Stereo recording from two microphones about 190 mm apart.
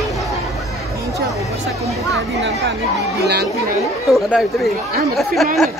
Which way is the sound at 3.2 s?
60° right (ahead or behind).